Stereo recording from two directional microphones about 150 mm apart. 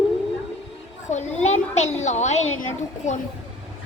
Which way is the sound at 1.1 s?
50° left (ahead or behind).